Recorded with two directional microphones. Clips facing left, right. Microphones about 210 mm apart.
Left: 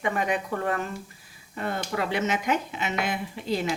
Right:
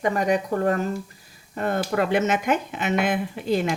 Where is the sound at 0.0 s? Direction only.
40° right (ahead or behind).